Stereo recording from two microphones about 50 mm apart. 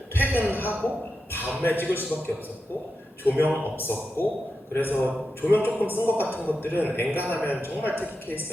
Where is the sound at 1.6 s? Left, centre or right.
Left.